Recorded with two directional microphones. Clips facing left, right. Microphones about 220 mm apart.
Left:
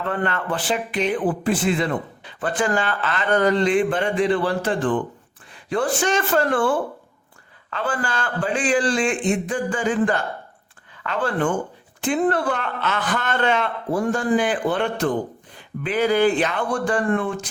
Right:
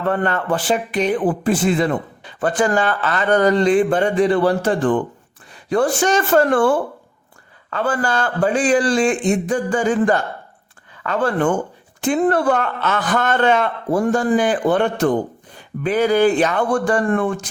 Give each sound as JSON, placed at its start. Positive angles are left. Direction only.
{"t": 0.1, "sound": "a man's voice", "side_deg": -40}
{"t": 12.0, "sound": "a man's voice", "side_deg": -45}